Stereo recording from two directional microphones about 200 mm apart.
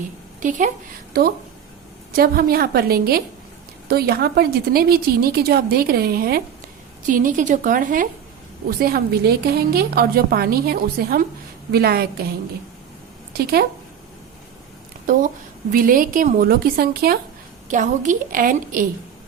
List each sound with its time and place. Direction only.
0.3 s speech: 40° right (ahead or behind)
2.1 s a woman's voice: 50° right (ahead or behind)
13.3 s a woman's voice: 50° right (ahead or behind)
15.7 s a woman's voice: 45° right (ahead or behind)
17.7 s a woman's voice: 40° right (ahead or behind)